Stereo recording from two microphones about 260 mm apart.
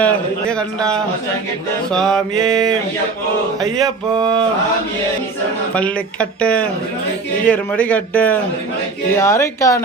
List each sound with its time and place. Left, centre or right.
0.0 s a man's voice: centre
5.7 s a man's voice: centre